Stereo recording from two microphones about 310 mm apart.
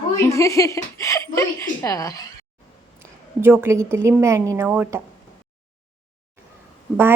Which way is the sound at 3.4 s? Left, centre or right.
Centre.